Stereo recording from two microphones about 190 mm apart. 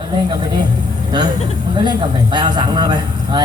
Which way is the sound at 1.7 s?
25° right (ahead or behind).